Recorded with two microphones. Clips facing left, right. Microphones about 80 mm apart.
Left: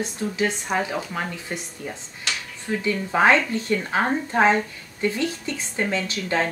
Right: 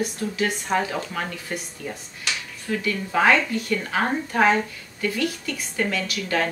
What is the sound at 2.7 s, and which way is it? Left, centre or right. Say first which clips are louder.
A woman's voice: left 1 dB; left.